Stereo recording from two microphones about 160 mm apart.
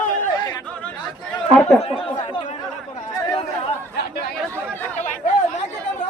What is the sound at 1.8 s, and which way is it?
Chatter, 35° left (ahead or behind).